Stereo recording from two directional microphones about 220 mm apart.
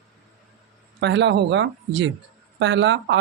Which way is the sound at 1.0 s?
55° right (ahead or behind).